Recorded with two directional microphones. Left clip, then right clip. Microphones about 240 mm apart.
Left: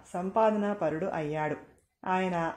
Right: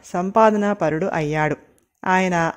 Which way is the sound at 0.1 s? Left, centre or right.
Right.